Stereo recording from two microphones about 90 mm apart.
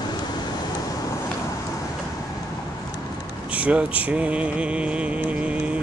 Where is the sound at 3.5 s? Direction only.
15° right (ahead or behind).